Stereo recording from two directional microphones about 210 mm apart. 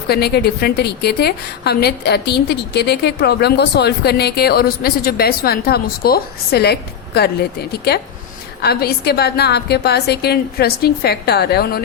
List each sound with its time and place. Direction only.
0.1 s a woman's voice: 50° left (ahead or behind)